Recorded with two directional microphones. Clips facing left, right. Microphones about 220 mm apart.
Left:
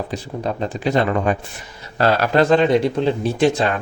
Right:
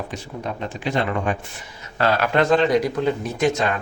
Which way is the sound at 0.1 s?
35° left (ahead or behind).